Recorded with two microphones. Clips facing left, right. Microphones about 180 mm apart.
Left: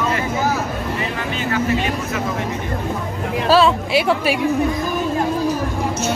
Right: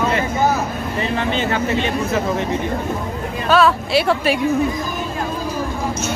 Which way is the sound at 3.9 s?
10° left (ahead or behind).